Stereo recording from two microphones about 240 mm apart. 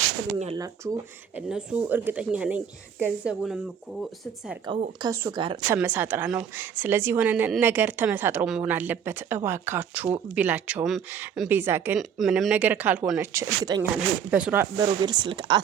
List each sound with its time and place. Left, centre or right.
0.3 s speech: right
1.4 s speech: centre
4.9 s a woman's voice: centre
5.7 s a woman's voice: centre